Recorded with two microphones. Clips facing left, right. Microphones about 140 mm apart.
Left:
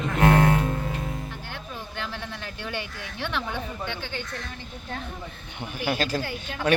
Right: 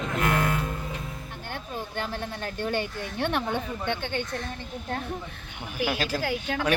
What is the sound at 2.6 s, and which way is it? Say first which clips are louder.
Speech: right 6 dB; 50° right (ahead or behind).